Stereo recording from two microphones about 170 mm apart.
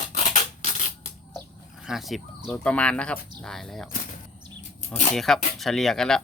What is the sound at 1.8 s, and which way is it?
Speech, centre (ahead or behind).